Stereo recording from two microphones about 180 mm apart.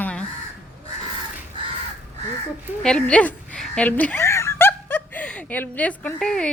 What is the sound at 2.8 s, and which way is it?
Fowl, 5° left (ahead or behind).